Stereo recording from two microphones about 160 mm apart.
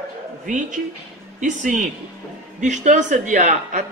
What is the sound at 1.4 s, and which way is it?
A woman's voice, 50° right (ahead or behind).